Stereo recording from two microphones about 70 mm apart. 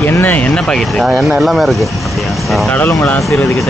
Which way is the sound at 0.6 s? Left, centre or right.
Centre.